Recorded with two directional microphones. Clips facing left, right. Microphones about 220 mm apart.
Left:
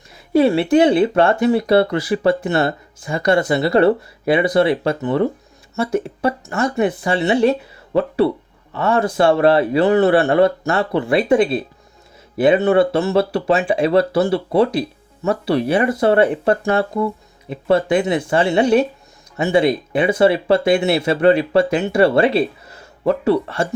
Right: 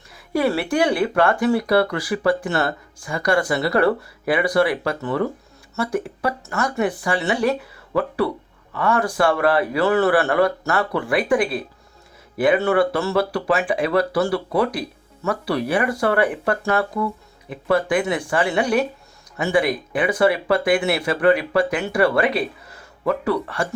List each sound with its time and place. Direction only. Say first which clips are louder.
0.1 s speech: left 6 dB; 25° left (ahead or behind)